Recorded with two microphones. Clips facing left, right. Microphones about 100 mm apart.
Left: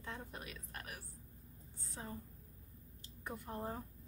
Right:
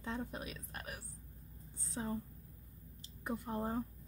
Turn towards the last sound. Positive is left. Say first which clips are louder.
# right 6 dB
turn(degrees=-20)  # may be behind; listen again after turning